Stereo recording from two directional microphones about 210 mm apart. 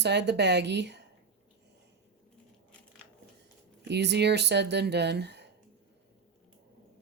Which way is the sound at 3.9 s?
55° right (ahead or behind).